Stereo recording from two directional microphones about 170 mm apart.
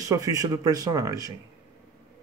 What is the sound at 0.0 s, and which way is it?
Speech, 20° right (ahead or behind).